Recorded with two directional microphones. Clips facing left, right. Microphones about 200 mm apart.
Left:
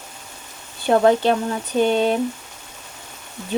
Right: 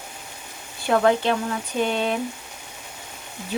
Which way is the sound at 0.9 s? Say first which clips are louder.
Left 4 dB; 35° left (ahead or behind).